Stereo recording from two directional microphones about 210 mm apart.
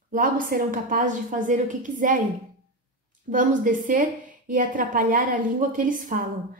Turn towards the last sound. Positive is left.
turn(degrees=-40)  # may be behind; listen again after turning